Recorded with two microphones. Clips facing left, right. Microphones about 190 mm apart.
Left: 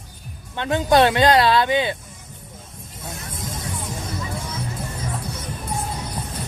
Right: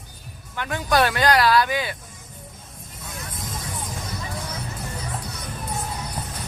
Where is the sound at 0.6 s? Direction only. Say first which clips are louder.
Left 5 dB; 25° left (ahead or behind).